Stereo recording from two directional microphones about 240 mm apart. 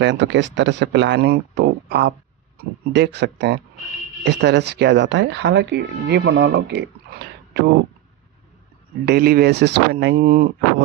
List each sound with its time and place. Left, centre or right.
0.0 s speech: right
9.0 s speech: right